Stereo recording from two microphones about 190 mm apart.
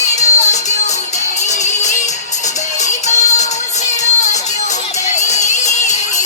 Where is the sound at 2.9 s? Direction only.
40° left (ahead or behind).